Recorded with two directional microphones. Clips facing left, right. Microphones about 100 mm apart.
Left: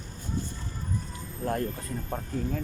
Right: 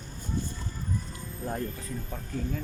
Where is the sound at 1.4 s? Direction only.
90° left.